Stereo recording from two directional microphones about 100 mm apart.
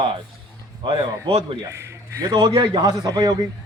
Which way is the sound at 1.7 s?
25° right (ahead or behind).